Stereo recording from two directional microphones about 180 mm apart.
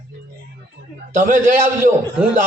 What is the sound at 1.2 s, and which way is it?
Speech, 45° right (ahead or behind).